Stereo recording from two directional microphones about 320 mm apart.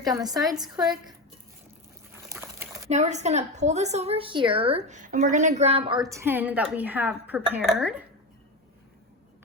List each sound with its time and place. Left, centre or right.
0.0 s a woman's voice: centre
2.3 s dog: centre
2.9 s a woman's voice: right; by 8.0 s centre